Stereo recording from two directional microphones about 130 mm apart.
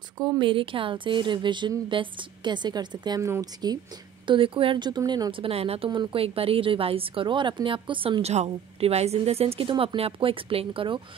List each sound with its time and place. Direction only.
0.2 s a woman's voice: 35° right (ahead or behind)
4.3 s a woman's voice: 45° right (ahead or behind)
5.9 s a woman's voice: 35° right (ahead or behind)